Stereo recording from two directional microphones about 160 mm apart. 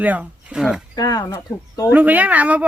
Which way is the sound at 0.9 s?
25° left (ahead or behind).